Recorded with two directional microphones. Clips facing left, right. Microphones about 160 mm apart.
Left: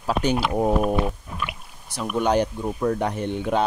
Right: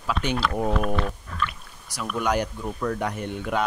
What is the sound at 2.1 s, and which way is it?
Speech, 30° left (ahead or behind).